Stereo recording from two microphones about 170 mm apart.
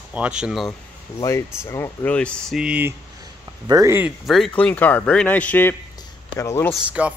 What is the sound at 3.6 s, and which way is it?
Speech, 20° right (ahead or behind).